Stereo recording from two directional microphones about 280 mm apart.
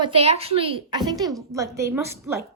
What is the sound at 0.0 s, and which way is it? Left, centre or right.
A woman's voice, right.